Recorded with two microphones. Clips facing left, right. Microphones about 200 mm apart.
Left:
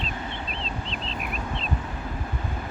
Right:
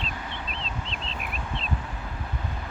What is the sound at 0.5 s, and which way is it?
Vehicle, 35° left (ahead or behind).